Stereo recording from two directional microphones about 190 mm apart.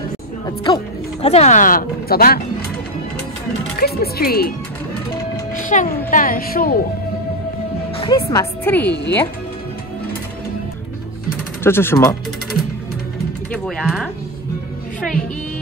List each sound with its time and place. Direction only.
0.7 s speech: 25° left (ahead or behind); by 2.4 s 50° left (ahead or behind)
3.7 s speech: 55° left (ahead or behind)
5.6 s speech: 40° left (ahead or behind)
8.0 s speech: 25° left (ahead or behind)
11.6 s speech: 10° left (ahead or behind)
13.5 s speech: 5° left (ahead or behind)